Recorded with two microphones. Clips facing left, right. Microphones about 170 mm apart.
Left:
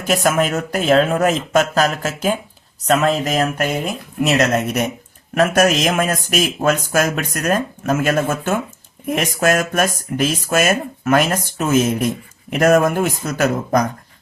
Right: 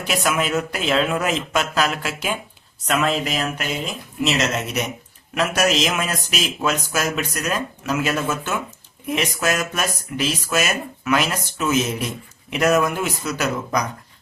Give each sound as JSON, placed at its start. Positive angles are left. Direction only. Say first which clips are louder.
{"t": 0.0, "sound": "speech", "louder": "left 5 dB", "side_deg": 45}